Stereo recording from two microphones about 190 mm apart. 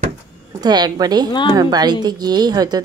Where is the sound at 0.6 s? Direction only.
20° right (ahead or behind).